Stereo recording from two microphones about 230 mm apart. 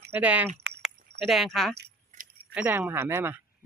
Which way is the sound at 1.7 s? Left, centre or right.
Right.